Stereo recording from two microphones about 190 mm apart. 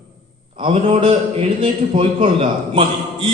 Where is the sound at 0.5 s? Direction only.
30° right (ahead or behind).